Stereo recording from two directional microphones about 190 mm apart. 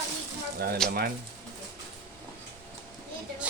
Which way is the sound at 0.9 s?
55° right (ahead or behind).